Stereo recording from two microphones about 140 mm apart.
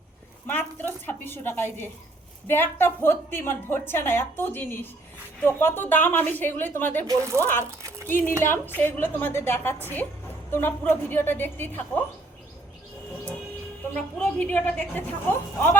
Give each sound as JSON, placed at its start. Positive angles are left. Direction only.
{"t": 0.4, "sound": "a woman's voice", "side_deg": 15}
{"t": 7.1, "sound": "speech", "side_deg": -20}
{"t": 8.0, "sound": "a woman's voice", "side_deg": 15}
{"t": 13.9, "sound": "a woman's voice", "side_deg": 10}